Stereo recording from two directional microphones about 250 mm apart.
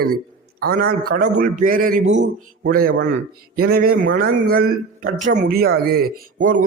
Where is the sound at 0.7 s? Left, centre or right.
Right.